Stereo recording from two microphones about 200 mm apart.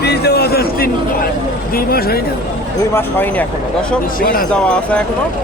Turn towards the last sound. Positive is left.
turn(degrees=5)  # may be behind; listen again after turning